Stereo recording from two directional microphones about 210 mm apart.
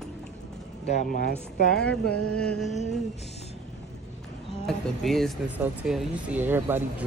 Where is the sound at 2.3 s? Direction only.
5° left (ahead or behind).